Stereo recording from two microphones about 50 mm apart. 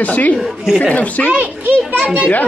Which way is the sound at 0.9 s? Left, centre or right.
Left.